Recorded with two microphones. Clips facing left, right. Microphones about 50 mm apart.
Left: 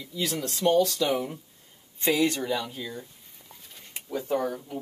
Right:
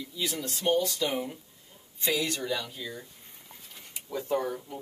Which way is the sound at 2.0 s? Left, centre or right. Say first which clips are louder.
Left 5 dB; left.